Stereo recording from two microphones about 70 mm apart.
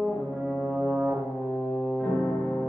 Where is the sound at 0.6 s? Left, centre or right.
Right.